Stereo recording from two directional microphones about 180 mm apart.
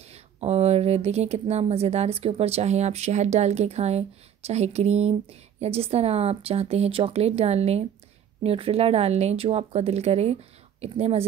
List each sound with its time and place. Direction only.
0.1 s speech: 35° right (ahead or behind)